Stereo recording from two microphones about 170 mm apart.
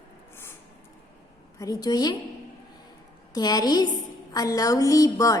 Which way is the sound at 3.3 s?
25° left (ahead or behind).